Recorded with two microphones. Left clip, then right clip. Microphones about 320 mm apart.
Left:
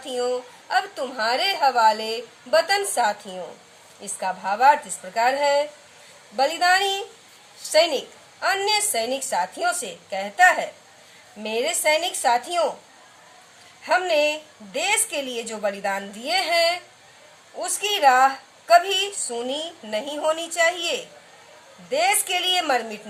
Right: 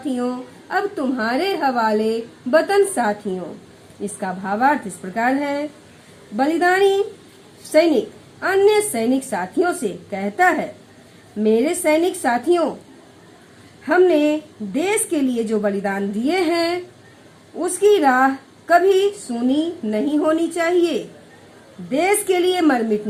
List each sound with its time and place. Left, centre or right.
0.7 s a woman's voice: left
4.2 s a woman's voice: left
8.4 s a woman's voice: left
13.8 s a woman's voice: left
21.9 s a woman's voice: left